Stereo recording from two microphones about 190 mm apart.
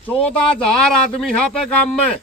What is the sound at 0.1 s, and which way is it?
Speech, 5° left (ahead or behind).